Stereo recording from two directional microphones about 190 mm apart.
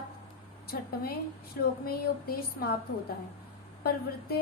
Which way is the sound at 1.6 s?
55° left (ahead or behind).